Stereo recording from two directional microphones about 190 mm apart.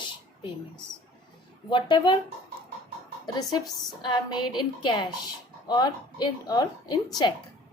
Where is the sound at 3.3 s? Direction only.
20° left (ahead or behind).